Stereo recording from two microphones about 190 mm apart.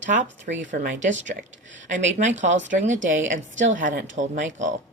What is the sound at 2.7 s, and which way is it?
Speech, 40° right (ahead or behind).